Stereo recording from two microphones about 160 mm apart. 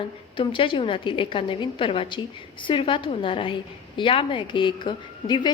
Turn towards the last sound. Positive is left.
turn(degrees=30)  # may be behind; listen again after turning